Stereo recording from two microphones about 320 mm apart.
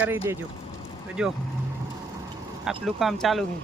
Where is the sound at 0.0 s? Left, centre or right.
Centre.